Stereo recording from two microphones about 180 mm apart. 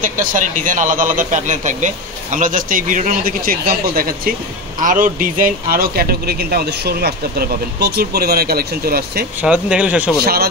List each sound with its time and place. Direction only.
0.0 s a man's voice: 50° right (ahead or behind)
9.4 s speech: 5° right (ahead or behind)